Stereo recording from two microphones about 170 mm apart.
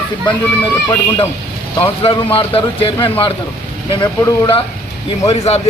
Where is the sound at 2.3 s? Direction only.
30° left (ahead or behind).